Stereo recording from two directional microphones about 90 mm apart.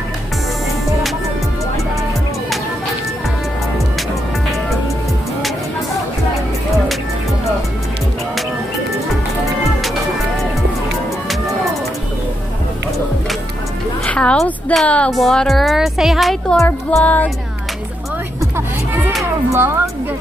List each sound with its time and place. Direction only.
14.0 s a sound: 10° left (ahead or behind)
14.9 s music: 15° left (ahead or behind)
15.1 s speech: 5° left (ahead or behind)
16.9 s music: 15° left (ahead or behind)
19.5 s a woman's voice: 30° right (ahead or behind)